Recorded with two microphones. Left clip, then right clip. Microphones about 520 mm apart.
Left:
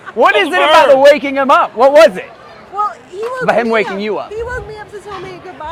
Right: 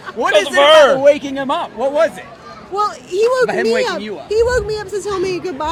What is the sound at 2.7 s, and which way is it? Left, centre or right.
Speech, right.